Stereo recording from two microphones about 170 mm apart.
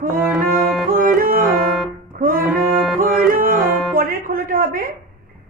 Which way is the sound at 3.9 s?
60° right (ahead or behind).